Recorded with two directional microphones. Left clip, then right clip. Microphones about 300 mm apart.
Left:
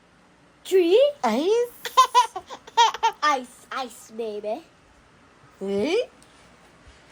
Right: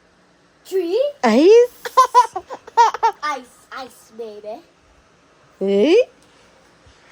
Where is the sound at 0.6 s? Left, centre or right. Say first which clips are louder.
Left 2 dB; left.